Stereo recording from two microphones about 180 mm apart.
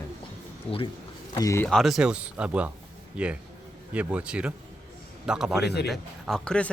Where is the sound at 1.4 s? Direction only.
15° left (ahead or behind).